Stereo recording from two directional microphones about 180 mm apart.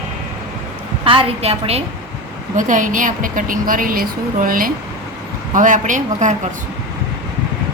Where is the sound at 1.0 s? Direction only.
30° right (ahead or behind).